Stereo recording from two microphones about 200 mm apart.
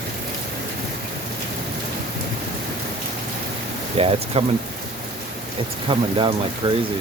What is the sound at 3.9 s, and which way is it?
Speech, 30° right (ahead or behind).